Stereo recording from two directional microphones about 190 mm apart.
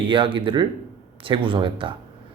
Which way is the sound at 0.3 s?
25° right (ahead or behind).